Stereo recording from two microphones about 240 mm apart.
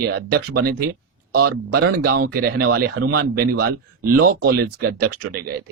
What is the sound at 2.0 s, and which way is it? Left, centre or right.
Speech, right.